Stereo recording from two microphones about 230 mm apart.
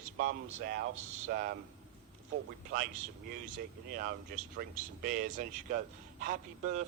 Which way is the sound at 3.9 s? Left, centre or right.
Right.